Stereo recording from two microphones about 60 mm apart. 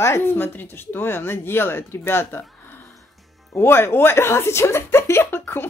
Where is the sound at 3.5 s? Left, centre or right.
Left.